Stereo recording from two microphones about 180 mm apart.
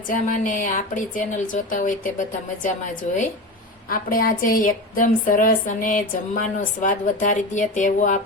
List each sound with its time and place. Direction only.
0.1 s a woman's voice: 50° left (ahead or behind)